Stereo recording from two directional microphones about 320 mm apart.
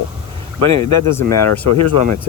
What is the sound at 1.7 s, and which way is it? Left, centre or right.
Speech, left.